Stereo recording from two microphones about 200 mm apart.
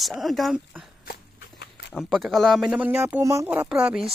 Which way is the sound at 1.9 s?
Centre (ahead or behind).